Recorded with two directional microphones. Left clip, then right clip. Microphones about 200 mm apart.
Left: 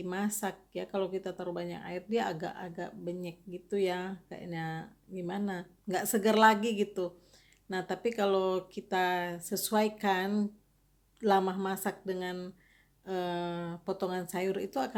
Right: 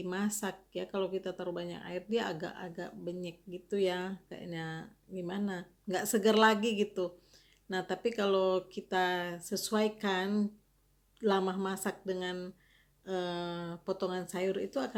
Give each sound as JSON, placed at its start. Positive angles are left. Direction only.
{"t": 0.0, "sound": "speech", "side_deg": 0}